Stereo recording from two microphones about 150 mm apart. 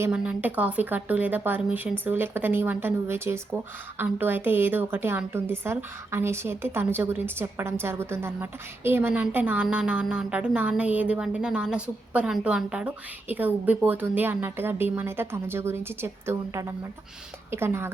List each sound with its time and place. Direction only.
0.1 s speech: 10° right (ahead or behind)